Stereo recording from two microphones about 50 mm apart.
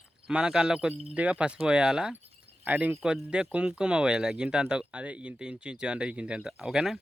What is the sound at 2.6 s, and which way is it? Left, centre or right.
Speech, right.